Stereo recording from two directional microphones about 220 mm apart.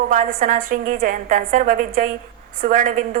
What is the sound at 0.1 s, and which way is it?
A woman's voice, 40° right (ahead or behind).